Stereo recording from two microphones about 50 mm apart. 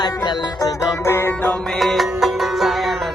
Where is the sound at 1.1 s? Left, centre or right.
Left.